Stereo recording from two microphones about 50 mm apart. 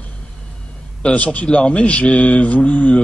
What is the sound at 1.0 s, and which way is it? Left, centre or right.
Speech, left.